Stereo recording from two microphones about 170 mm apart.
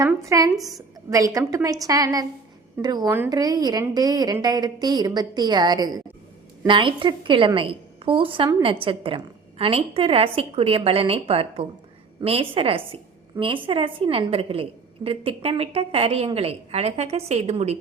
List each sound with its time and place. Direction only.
0.0 s a woman's voice: 20° right (ahead or behind); by 17.7 s 40° right (ahead or behind)